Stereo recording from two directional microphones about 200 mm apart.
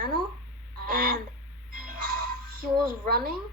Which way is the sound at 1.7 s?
45° right (ahead or behind).